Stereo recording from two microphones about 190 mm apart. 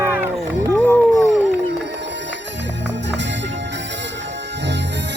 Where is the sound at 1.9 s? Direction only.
65° right (ahead or behind).